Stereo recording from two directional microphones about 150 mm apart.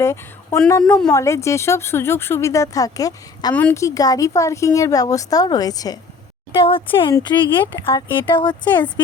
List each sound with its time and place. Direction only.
0.0 s speech: 20° left (ahead or behind)
3.5 s a woman's voice: 10° left (ahead or behind)
3.8 s speech: 20° left (ahead or behind)
6.5 s speech: 35° left (ahead or behind)
8.6 s a woman's voice: 10° left (ahead or behind)